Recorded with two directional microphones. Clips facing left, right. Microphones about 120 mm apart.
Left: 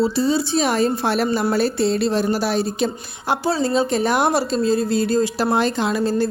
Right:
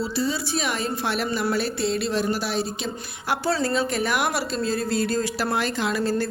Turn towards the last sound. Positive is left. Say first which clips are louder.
# left 4 dB
turn(degrees=20)  # may be behind; listen again after turning